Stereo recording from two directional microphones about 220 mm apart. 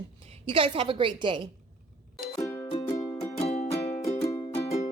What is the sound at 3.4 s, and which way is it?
Music, 30° left (ahead or behind).